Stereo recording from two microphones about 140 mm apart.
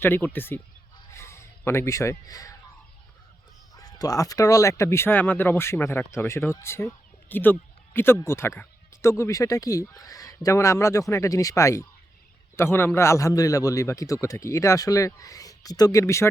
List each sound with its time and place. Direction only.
0.0 s speech: 15° left (ahead or behind)
1.1 s a sound: 20° left (ahead or behind)
3.8 s speech: 25° left (ahead or behind)